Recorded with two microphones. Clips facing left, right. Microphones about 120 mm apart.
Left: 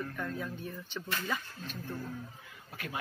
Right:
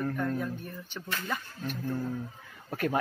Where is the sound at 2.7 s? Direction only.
45° right (ahead or behind).